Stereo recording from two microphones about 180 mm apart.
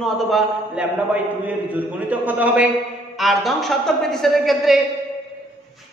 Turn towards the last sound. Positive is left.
turn(degrees=0)  # may be behind; listen again after turning